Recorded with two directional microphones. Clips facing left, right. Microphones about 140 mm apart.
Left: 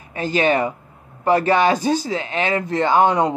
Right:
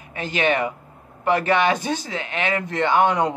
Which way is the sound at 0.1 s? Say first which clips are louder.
Left 4 dB; 35° left (ahead or behind).